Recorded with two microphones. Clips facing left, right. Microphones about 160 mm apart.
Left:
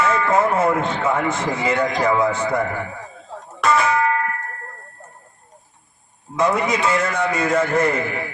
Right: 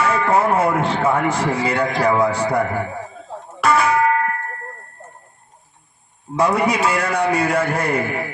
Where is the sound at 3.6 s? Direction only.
30° right (ahead or behind).